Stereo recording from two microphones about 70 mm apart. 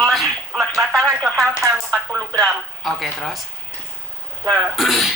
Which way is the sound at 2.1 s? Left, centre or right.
Right.